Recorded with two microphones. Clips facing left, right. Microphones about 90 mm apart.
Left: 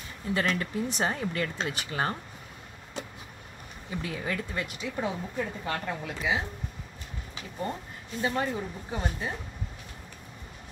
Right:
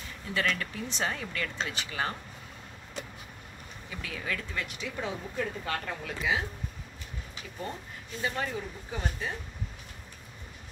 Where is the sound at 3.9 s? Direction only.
30° left (ahead or behind).